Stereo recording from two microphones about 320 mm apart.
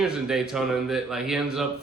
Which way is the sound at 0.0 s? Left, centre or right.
Centre.